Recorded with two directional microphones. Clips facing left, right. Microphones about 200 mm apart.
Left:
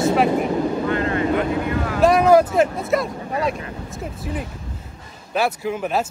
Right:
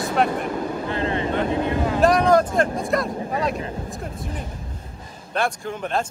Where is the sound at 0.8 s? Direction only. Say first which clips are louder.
Left 3 dB; 30° right (ahead or behind).